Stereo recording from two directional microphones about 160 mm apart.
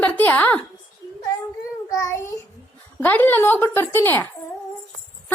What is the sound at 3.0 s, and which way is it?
Speech, 10° left (ahead or behind).